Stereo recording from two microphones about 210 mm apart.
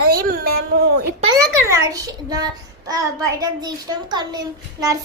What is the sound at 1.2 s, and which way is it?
A child's voice, 15° right (ahead or behind).